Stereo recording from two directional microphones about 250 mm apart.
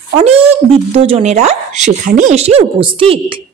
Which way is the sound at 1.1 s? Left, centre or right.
Right.